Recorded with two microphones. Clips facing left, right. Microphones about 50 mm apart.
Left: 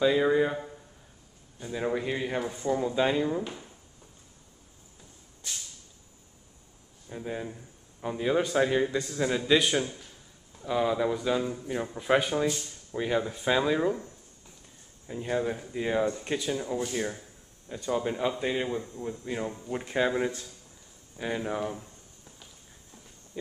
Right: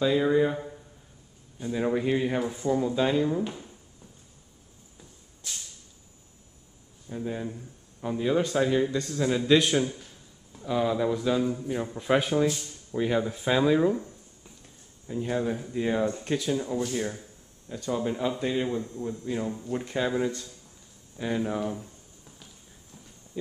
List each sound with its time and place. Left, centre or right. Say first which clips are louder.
0.0 s a sound: even; centre
1.6 s a man's voice: right 3 dB; centre
7.1 s a man's voice: right 3 dB; centre
15.0 s a man's voice: right 1 dB; centre
21.2 s a sound: right 2 dB; centre
23.3 s speech: right 2 dB; centre